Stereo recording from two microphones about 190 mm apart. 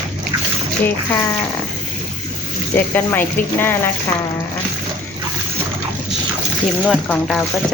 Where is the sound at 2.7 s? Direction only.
10° left (ahead or behind).